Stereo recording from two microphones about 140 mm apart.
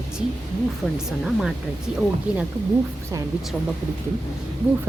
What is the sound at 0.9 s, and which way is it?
A woman's voice, 5° right (ahead or behind).